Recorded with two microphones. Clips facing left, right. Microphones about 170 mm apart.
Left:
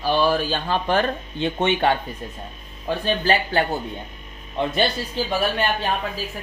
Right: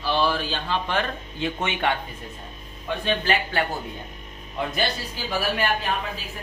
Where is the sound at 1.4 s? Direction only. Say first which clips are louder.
Left 5 dB; 30° left (ahead or behind).